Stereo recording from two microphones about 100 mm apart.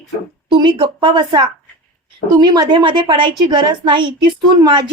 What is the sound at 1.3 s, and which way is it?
A woman's voice, 45° right (ahead or behind).